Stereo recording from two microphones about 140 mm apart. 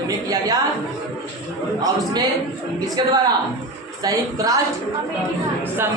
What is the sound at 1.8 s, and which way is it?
A woman's voice, 30° right (ahead or behind).